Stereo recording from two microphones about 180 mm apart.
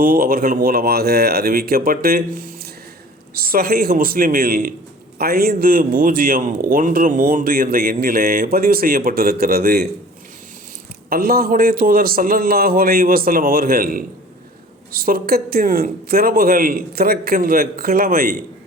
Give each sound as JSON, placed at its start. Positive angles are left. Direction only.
{"t": 0.0, "sound": "a man's voice", "side_deg": -55}
{"t": 11.1, "sound": "speech", "side_deg": -55}